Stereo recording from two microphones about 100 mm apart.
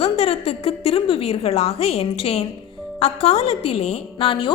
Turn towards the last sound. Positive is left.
turn(degrees=60)  # may be behind; listen again after turning